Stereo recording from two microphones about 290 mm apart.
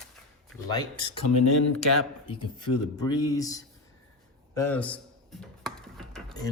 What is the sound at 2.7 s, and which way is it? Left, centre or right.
Speech, left.